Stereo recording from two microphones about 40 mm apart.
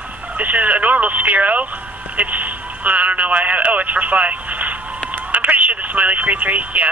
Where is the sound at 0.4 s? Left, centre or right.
Right.